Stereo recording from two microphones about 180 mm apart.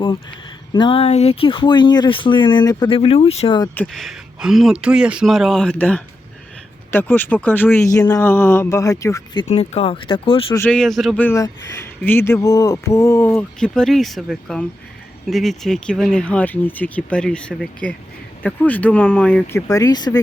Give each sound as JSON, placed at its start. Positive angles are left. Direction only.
{"t": 0.7, "sound": "speech", "side_deg": 25}
{"t": 3.8, "sound": "speech", "side_deg": 0}
{"t": 9.5, "sound": "speech", "side_deg": 35}
{"t": 10.6, "sound": "speech", "side_deg": 5}
{"t": 13.3, "sound": "speech", "side_deg": 5}
{"t": 19.6, "sound": "speech", "side_deg": 20}